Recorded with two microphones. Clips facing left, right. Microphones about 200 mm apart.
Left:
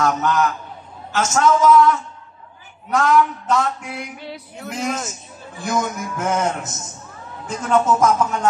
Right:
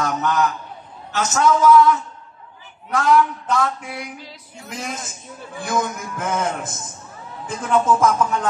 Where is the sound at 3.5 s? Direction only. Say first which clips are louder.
Left 1 dB; 55° right (ahead or behind).